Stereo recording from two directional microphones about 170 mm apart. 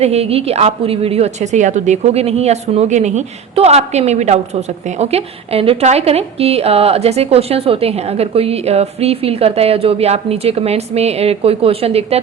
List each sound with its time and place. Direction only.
0.0 s a woman's voice: 35° right (ahead or behind)